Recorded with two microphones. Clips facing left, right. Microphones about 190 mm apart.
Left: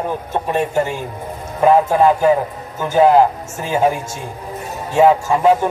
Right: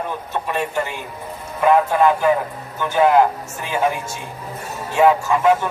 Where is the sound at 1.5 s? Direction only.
30° left (ahead or behind).